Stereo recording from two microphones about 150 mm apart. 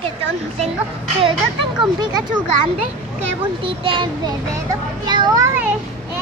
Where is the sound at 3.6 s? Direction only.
35° right (ahead or behind).